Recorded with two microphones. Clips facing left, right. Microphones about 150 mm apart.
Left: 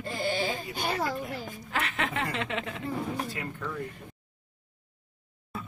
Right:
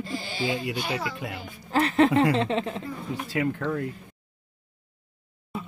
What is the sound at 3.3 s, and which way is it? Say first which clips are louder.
Speech: right 9 dB; 90° right.